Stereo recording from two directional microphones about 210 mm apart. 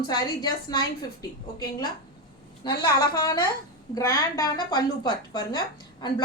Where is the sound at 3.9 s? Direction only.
15° left (ahead or behind).